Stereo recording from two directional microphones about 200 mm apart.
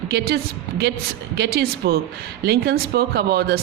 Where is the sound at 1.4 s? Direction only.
55° right (ahead or behind).